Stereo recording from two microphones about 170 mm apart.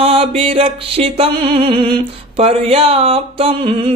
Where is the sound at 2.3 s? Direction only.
35° right (ahead or behind).